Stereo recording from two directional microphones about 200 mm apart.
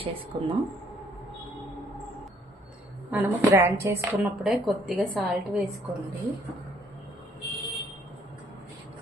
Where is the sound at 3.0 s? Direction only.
10° right (ahead or behind).